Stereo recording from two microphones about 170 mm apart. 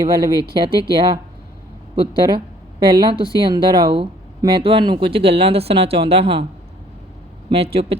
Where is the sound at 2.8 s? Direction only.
30° right (ahead or behind).